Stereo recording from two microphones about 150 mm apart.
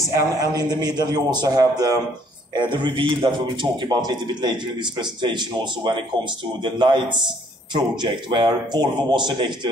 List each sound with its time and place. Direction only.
0.1 s a man's voice: 20° right (ahead or behind)